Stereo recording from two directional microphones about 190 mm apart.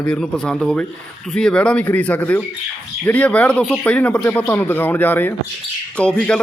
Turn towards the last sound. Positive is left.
turn(degrees=5)  # may be behind; listen again after turning